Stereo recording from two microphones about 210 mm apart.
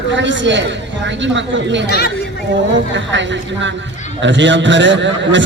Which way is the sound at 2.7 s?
60° right (ahead or behind).